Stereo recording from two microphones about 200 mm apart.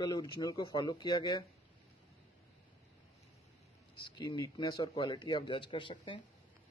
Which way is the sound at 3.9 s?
25° left (ahead or behind).